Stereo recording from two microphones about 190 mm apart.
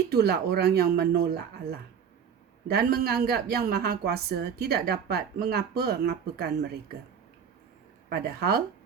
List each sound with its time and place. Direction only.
0.1 s a woman's voice: 60° right (ahead or behind)
8.1 s speech: 55° right (ahead or behind)